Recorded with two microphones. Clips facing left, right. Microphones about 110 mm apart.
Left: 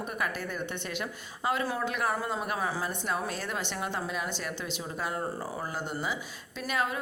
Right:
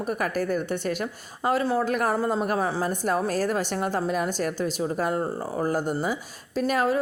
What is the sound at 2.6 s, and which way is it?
Speech, 30° right (ahead or behind).